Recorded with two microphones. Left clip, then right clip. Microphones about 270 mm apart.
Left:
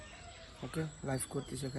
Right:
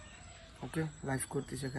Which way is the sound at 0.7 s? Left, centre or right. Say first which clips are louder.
Right 1 dB; centre.